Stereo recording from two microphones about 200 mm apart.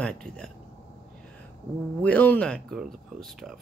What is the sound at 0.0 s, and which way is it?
Speech, 5° left (ahead or behind).